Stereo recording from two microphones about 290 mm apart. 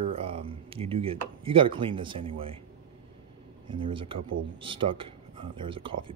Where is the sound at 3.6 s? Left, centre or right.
Centre.